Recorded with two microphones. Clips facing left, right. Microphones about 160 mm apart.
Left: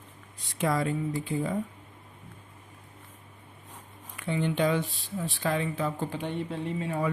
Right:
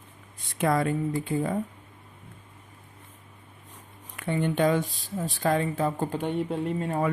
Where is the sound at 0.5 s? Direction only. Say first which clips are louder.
Right 3 dB; 55° right (ahead or behind).